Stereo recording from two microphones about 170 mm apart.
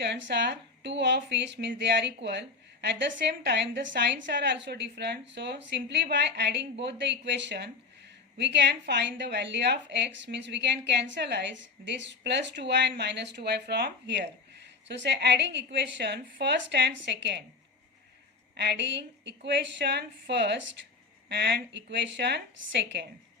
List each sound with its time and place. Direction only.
0.0 s a woman's voice: 85° right
12.9 s a woman's voice: 80° right
18.5 s a woman's voice: 85° right
21.2 s a woman's voice: 80° right